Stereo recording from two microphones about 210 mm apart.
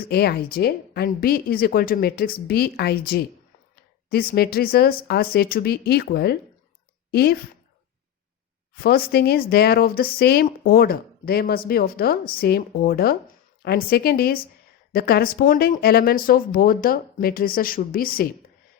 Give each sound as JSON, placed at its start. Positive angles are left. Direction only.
{"t": 0.1, "sound": "a woman's voice", "side_deg": 50}
{"t": 8.7, "sound": "speech", "side_deg": 45}